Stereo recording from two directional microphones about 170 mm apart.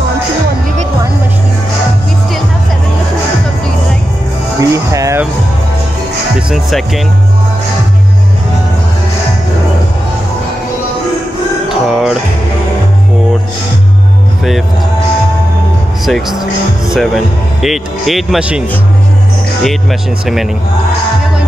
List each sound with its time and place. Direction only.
4.6 s music: 20° right (ahead or behind)
11.7 s music: centre (ahead or behind)
16.1 s speech: centre (ahead or behind)
19.6 s speech: centre (ahead or behind)